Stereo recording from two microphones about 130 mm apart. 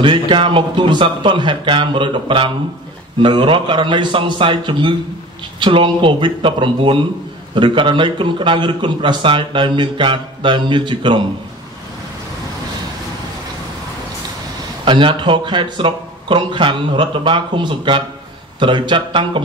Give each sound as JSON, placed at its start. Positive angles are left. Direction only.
{"t": 0.0, "sound": "a man's voice", "side_deg": -40}
{"t": 14.9, "sound": "a man's voice", "side_deg": -40}